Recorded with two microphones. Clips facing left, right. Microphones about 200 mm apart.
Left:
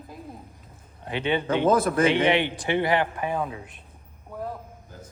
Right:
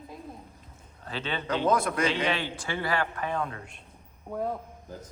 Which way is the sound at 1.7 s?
5° left (ahead or behind).